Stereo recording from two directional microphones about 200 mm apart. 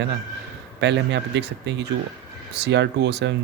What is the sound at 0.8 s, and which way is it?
Speech, 60° right (ahead or behind).